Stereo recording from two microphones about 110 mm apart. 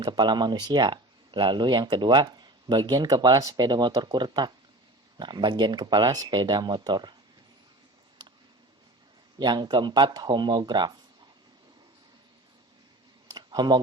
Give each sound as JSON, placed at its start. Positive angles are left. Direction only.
{"t": 0.0, "sound": "speech", "side_deg": -40}
{"t": 9.4, "sound": "speech", "side_deg": -40}
{"t": 13.3, "sound": "a sound", "side_deg": -40}